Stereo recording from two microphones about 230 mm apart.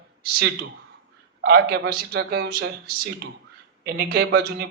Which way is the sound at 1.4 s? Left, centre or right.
Right.